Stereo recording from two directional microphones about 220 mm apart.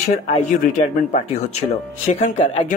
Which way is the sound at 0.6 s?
30° left (ahead or behind).